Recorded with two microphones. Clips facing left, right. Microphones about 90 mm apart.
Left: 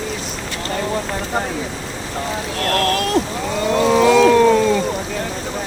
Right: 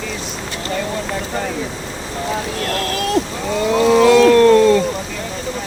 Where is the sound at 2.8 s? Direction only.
50° left (ahead or behind).